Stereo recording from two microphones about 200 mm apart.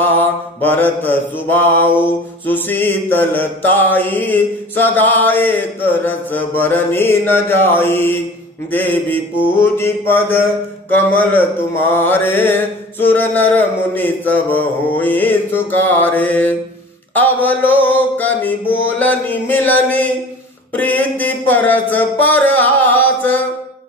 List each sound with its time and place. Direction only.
0.6 s mantra: 10° left (ahead or behind)